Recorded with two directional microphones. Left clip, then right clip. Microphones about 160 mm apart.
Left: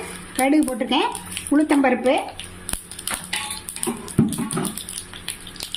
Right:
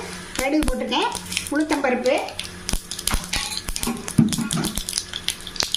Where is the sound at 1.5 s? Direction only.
65° left (ahead or behind).